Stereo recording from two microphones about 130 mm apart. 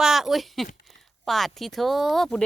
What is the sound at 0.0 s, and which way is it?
Speech, centre (ahead or behind).